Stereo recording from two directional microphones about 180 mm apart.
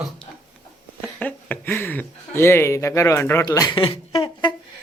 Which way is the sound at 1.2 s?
10° left (ahead or behind).